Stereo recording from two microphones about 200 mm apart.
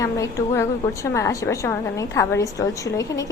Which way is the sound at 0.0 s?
15° left (ahead or behind).